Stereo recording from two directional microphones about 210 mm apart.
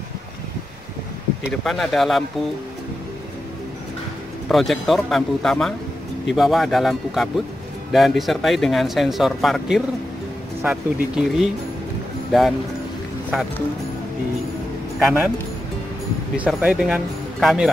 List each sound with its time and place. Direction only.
1.4 s speech: centre (ahead or behind)
4.5 s speech: centre (ahead or behind)
15.0 s speech: 5° right (ahead or behind)
16.3 s speech: 5° right (ahead or behind)